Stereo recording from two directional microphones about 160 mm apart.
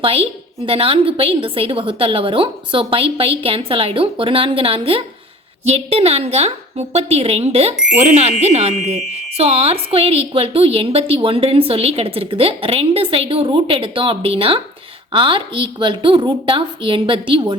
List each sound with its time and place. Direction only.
0.0 s a woman's voice: 35° right (ahead or behind)
7.8 s a child's voice: 5° right (ahead or behind)
8.1 s a woman's voice: 40° right (ahead or behind)